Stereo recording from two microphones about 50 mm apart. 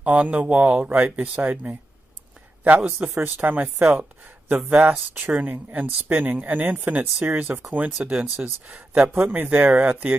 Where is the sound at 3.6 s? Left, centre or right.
Right.